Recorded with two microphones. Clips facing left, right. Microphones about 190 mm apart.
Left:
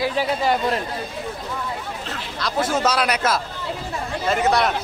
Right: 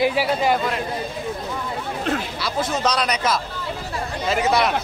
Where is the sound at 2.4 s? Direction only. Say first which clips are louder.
Left 4 dB; 5° left (ahead or behind).